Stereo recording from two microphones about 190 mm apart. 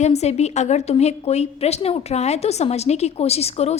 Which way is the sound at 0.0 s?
35° left (ahead or behind).